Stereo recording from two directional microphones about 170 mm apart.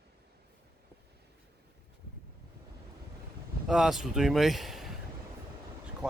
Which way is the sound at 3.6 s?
Centre (ahead or behind).